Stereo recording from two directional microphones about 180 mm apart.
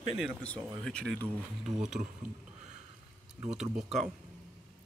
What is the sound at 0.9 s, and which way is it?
Speech, 5° left (ahead or behind).